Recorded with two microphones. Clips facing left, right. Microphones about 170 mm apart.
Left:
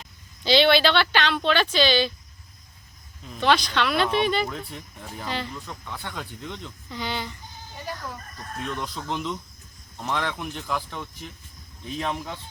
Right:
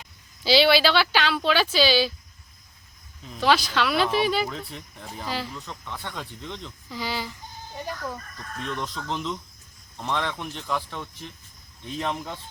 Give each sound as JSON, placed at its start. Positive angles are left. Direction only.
{"t": 0.4, "sound": "speech", "side_deg": -5}
{"t": 3.3, "sound": "speech", "side_deg": -5}
{"t": 8.6, "sound": "speech", "side_deg": 0}